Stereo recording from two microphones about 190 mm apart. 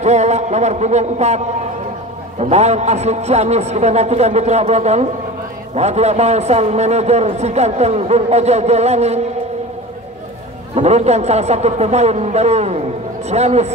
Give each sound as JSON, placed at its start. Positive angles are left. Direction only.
{"t": 0.0, "sound": "a man's voice", "side_deg": -35}
{"t": 10.7, "sound": "a man's voice", "side_deg": -35}